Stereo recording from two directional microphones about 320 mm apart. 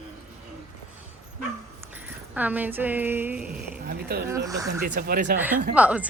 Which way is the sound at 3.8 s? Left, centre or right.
Right.